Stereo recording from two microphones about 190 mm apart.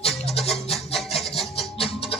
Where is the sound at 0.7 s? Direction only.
Centre (ahead or behind).